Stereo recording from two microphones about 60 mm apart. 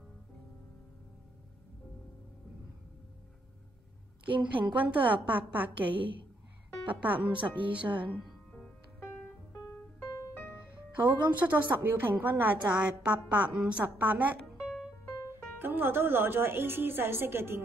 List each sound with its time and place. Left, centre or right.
4.3 s a woman's voice: right
8.5 s music: centre
9.9 s piano: left
11.0 s a woman's voice: right
12.7 s a woman's voice: centre
14.6 s music: centre
15.6 s a woman's voice: right